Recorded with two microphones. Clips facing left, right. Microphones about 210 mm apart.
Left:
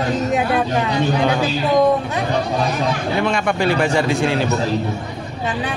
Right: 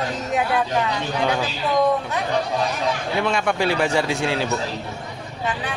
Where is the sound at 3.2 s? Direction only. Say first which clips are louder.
Left 1 dB; 5° right (ahead or behind).